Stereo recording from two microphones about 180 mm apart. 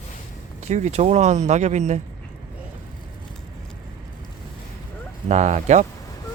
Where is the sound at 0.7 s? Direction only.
35° right (ahead or behind).